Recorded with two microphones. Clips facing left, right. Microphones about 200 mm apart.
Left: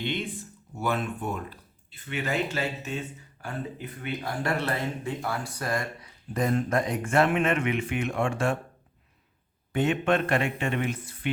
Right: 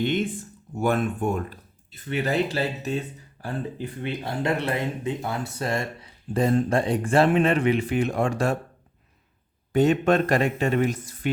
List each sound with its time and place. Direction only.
0.0 s speech: 45° right (ahead or behind)
9.7 s speech: 40° right (ahead or behind)